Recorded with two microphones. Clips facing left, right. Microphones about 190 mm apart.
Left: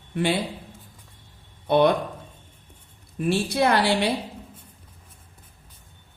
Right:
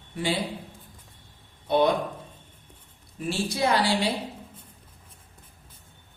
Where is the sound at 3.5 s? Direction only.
60° left (ahead or behind).